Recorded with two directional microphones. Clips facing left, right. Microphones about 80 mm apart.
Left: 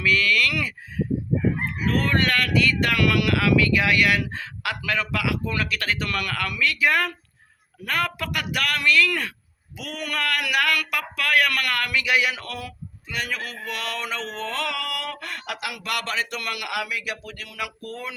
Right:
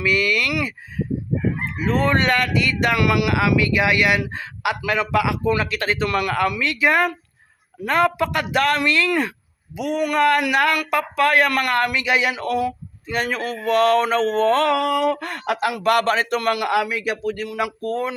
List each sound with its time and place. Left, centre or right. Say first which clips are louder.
0.0 s speech: right 2 dB; centre
13.1 s speech: right 7 dB; right